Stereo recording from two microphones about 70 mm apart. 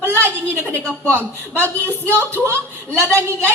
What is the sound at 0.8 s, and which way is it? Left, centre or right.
A woman's voice, left.